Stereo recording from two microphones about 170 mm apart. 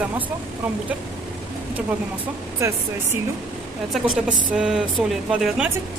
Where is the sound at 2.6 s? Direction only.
15° right (ahead or behind).